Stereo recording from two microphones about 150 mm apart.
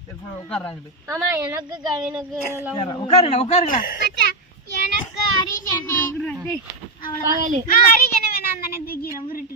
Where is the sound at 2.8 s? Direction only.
25° left (ahead or behind).